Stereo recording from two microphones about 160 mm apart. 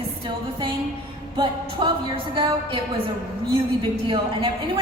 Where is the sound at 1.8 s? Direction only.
30° right (ahead or behind).